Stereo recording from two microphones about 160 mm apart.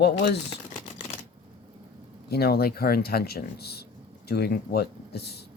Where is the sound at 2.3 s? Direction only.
75° left (ahead or behind).